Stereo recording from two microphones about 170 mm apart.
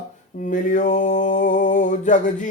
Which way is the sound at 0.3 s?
50° left (ahead or behind).